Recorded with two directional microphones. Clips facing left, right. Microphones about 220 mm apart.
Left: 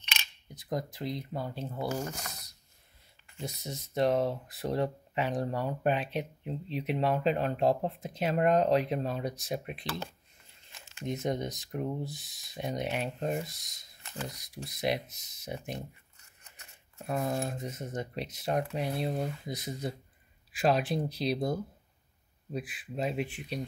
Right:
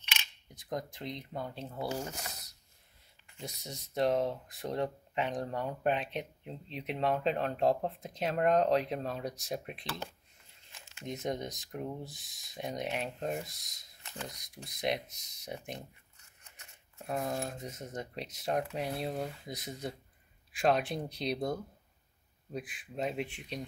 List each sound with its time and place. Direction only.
0.0 s camera: 10° right (ahead or behind)
0.6 s speech: 5° left (ahead or behind)
1.9 s speech: 15° right (ahead or behind)
3.3 s speech: centre (ahead or behind)
11.1 s speech: centre (ahead or behind)
17.1 s speech: centre (ahead or behind)